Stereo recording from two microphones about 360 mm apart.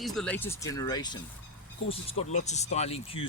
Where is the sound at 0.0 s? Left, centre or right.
Centre.